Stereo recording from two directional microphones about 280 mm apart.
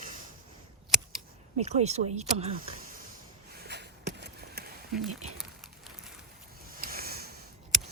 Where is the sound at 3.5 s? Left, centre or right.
Right.